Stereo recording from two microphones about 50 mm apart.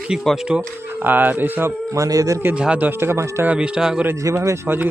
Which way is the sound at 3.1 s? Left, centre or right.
Right.